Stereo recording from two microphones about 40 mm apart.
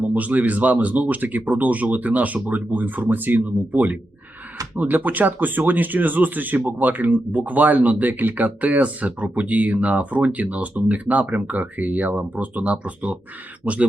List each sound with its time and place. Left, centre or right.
0.1 s speech: right